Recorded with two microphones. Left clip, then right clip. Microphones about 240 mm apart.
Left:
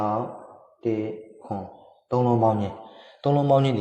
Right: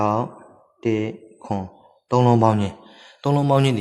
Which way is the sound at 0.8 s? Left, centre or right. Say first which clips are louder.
Right 4 dB; right.